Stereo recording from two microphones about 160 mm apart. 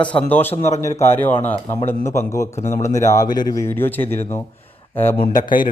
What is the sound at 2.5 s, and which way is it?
Speech, 45° left (ahead or behind).